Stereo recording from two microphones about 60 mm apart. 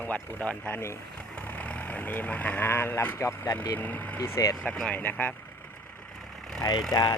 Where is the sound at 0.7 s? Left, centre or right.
Left.